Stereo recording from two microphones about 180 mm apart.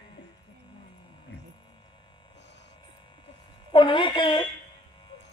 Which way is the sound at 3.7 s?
30° left (ahead or behind).